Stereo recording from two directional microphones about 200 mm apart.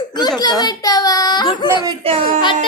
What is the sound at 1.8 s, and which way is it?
Speech, 25° right (ahead or behind).